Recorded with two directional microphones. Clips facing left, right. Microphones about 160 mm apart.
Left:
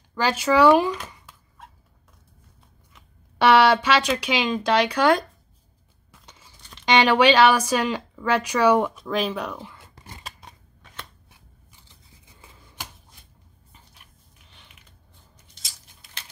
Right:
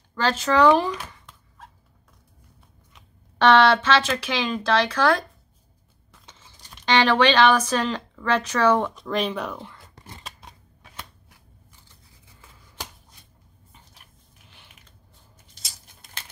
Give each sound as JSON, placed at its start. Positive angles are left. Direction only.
{"t": 0.1, "sound": "speech", "side_deg": 10}
{"t": 3.3, "sound": "speech", "side_deg": 10}
{"t": 6.9, "sound": "speech", "side_deg": 15}
{"t": 8.9, "sound": "speech", "side_deg": 0}